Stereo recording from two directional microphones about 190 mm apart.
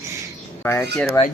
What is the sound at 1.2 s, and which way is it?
Speech, 25° left (ahead or behind).